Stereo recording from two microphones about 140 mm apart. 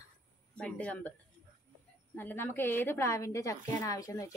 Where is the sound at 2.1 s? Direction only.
15° left (ahead or behind).